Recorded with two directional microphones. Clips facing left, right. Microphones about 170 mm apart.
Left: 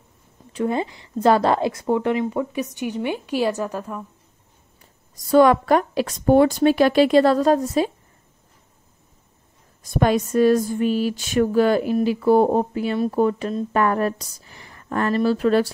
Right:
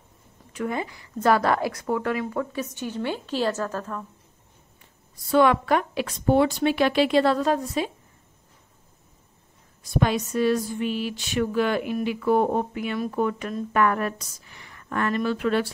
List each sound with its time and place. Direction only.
0.5 s a woman's voice: 30° left (ahead or behind); by 4.0 s 10° left (ahead or behind)
5.1 s speech: 40° left (ahead or behind)
9.9 s speech: 50° left (ahead or behind)